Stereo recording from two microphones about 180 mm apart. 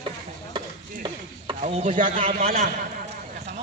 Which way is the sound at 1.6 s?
40° right (ahead or behind).